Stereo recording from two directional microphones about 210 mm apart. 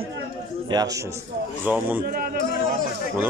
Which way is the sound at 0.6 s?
15° right (ahead or behind).